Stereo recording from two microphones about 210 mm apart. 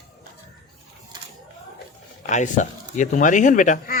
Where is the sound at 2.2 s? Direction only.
35° left (ahead or behind).